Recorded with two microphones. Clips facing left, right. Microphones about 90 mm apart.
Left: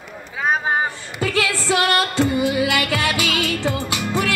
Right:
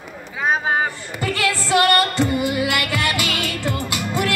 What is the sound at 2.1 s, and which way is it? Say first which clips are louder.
Music: left 1 dB; 20° left (ahead or behind).